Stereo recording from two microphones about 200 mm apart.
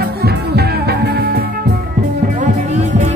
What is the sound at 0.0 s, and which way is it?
Music, 50° right (ahead or behind).